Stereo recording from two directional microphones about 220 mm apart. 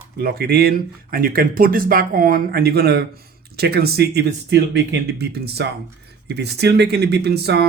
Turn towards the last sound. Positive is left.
turn(degrees=-45)  # may be behind; listen again after turning